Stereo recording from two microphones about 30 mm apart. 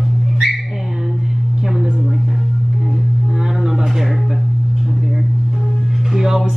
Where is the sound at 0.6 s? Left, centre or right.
Centre.